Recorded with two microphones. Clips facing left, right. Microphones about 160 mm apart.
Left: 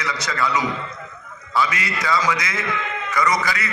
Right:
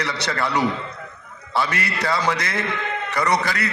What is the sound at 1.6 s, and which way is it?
A man's voice, 60° right (ahead or behind).